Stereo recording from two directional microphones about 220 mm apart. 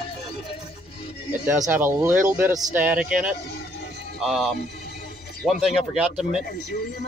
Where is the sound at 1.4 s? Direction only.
5° right (ahead or behind).